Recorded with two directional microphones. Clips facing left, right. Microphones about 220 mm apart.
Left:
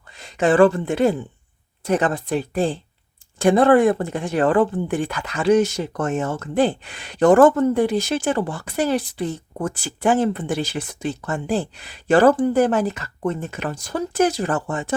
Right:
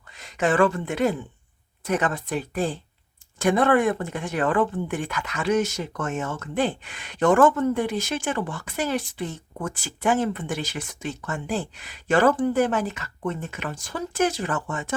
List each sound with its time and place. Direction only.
0.1 s speech: 30° left (ahead or behind)